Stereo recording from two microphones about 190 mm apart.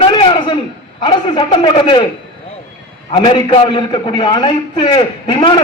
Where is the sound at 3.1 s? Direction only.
25° left (ahead or behind).